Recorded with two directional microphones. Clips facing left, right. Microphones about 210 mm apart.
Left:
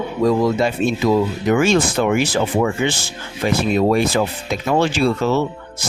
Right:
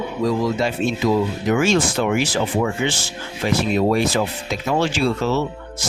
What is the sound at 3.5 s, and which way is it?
Speech, 55° left (ahead or behind).